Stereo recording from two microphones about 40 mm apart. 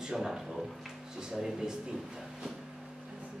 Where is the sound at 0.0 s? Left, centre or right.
Centre.